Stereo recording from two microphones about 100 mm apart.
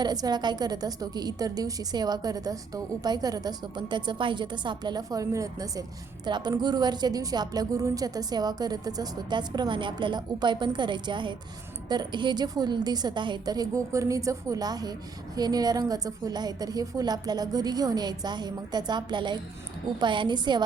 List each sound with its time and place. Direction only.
0.0 s a woman's voice: 45° right (ahead or behind)
6.2 s a woman's voice: 45° right (ahead or behind)